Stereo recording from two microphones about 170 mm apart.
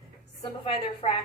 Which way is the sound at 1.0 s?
40° left (ahead or behind).